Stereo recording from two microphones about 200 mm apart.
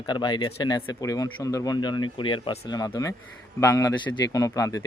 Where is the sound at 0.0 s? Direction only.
20° left (ahead or behind).